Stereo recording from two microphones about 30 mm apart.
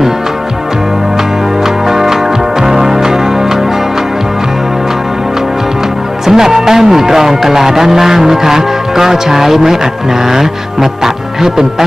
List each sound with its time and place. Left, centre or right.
1.9 s music: centre
6.2 s speech: centre